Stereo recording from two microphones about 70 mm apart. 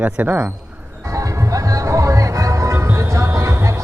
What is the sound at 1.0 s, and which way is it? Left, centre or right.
Music, right.